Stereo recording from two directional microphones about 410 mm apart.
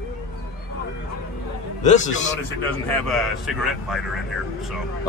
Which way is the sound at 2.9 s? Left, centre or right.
Centre.